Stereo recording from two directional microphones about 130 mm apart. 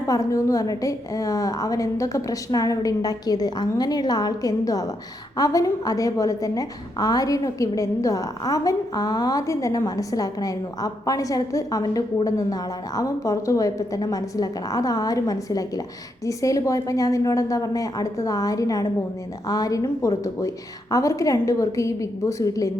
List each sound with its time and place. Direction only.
0.1 s a woman's voice: 25° left (ahead or behind)